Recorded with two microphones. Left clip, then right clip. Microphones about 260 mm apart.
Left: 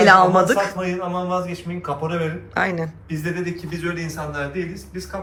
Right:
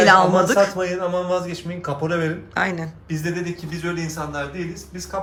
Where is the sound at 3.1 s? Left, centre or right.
Right.